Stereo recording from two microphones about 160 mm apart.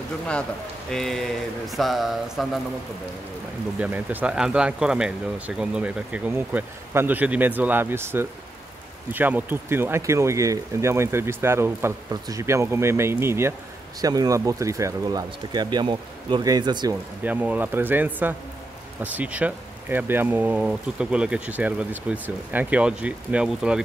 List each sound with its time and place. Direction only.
0.3 s speech: 5° left (ahead or behind)
3.8 s speech: 10° right (ahead or behind); by 16.9 s 25° right (ahead or behind)
17.2 s speech: 10° right (ahead or behind)